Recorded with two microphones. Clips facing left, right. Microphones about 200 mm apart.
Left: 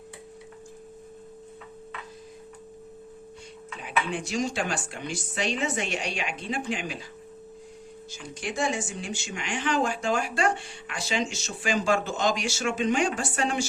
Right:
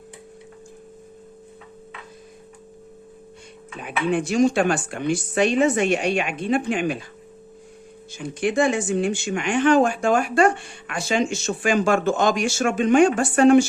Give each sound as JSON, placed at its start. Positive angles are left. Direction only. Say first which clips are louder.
{"t": 3.8, "sound": "speech", "louder": "right 7 dB", "side_deg": -55}
{"t": 8.1, "sound": "speech", "louder": "right 11 dB", "side_deg": -60}